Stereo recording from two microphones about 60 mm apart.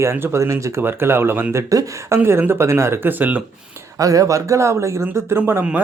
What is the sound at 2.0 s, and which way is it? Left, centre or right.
Speech, right.